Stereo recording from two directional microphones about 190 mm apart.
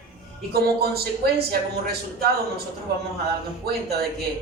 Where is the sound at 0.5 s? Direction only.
55° right (ahead or behind).